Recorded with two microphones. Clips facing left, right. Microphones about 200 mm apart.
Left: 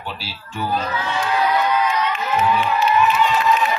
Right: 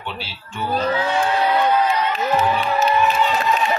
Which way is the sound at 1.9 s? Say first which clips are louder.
Right 2 dB; 35° right (ahead or behind).